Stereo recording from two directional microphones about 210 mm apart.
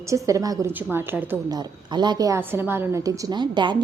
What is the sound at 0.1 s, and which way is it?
A woman's voice, 15° right (ahead or behind).